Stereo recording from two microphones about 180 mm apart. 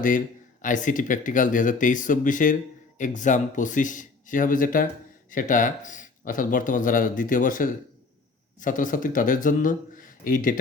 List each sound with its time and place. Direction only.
0.6 s speech: 45° left (ahead or behind)